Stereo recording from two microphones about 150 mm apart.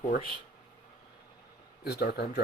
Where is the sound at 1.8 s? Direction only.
90° left.